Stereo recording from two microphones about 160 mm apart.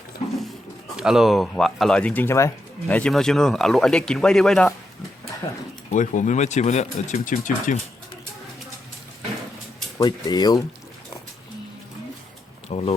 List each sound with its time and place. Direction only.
0.9 s speech: 5° right (ahead or behind); by 2.5 s 15° left (ahead or behind)
2.8 s speech: 5° left (ahead or behind)
5.4 s speech: 35° left (ahead or behind)
5.9 s speech: 50° left (ahead or behind)
10.0 s speech: 25° left (ahead or behind)
12.6 s speech: 40° left (ahead or behind)